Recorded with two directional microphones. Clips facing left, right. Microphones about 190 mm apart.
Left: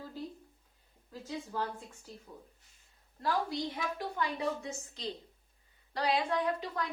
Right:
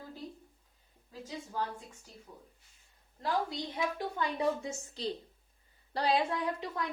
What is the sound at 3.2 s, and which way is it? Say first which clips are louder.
A woman's voice: left 1 dB; 25° right (ahead or behind).